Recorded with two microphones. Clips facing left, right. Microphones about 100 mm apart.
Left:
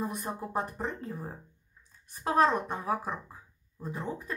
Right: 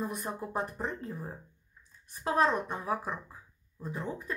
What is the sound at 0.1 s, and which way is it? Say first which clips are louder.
A woman's voice: left 1 dB; 25° left (ahead or behind).